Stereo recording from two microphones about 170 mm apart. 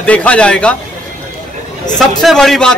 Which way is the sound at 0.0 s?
10° left (ahead or behind).